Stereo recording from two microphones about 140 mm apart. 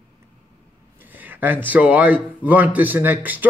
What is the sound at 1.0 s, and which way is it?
A man's voice, 15° right (ahead or behind).